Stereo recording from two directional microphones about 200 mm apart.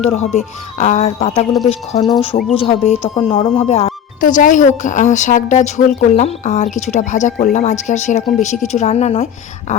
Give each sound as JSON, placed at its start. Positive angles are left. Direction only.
{"t": 0.0, "sound": "speech", "side_deg": 30}